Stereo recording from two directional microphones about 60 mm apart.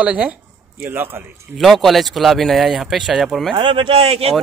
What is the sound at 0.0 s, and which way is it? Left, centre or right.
Speech, right.